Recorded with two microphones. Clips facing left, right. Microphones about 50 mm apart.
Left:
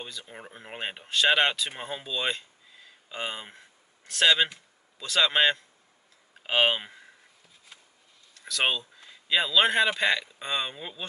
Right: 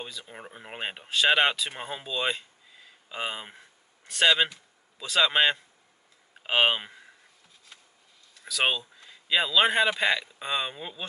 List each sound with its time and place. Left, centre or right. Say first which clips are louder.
0.0 s a man's voice: right 1 dB; centre
8.4 s speech: even; centre